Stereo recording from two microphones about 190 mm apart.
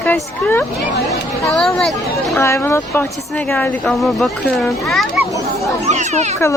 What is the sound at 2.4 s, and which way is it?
A woman's voice, 15° left (ahead or behind).